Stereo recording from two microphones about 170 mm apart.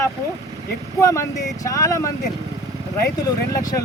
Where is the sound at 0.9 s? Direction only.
20° left (ahead or behind).